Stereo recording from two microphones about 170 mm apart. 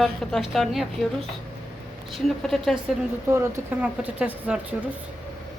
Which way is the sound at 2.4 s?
Centre (ahead or behind).